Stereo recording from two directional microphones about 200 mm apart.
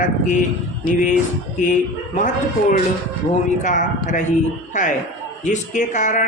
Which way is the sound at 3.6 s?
40° left (ahead or behind).